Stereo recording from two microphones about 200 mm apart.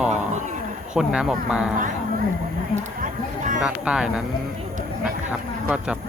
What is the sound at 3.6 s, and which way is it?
Speech, 5° right (ahead or behind).